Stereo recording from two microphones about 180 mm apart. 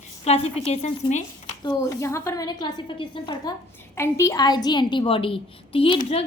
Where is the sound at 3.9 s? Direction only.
15° left (ahead or behind).